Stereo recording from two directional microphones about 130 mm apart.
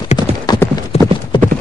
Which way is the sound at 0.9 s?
55° left (ahead or behind).